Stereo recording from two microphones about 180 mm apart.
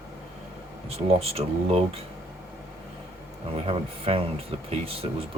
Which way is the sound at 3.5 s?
35° right (ahead or behind).